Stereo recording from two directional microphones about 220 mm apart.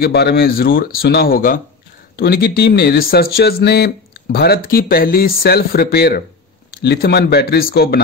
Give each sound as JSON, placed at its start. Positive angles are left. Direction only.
{"t": 0.0, "sound": "speech", "side_deg": 45}